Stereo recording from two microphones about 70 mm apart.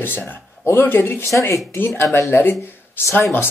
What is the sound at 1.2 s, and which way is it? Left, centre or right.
Speech, left.